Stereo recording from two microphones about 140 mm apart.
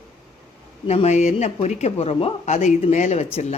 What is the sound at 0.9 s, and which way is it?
Speech, 50° left (ahead or behind).